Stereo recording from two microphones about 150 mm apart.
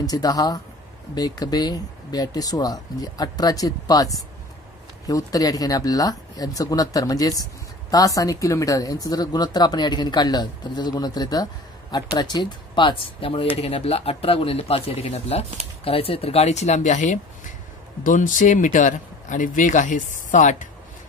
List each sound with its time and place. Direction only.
0.0 s speech: 25° left (ahead or behind); by 20.6 s 55° left (ahead or behind)